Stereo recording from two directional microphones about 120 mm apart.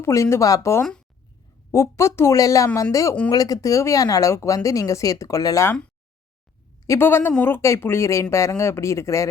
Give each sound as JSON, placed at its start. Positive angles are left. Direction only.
{"t": 0.0, "sound": "speech", "side_deg": 25}
{"t": 0.8, "sound": "speech", "side_deg": 5}
{"t": 1.7, "sound": "speech", "side_deg": 25}
{"t": 6.8, "sound": "speech", "side_deg": 20}